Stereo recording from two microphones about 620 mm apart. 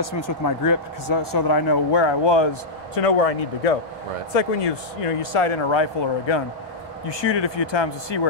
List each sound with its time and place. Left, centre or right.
0.7 s speech: left
3.0 s speech: left
5.2 s speech: left